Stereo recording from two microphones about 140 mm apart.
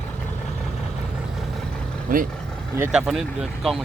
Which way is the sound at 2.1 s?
80° right.